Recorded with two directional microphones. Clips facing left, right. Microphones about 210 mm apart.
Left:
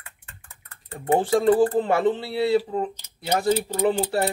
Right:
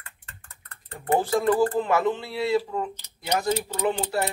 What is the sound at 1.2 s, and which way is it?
Speech, 30° left (ahead or behind).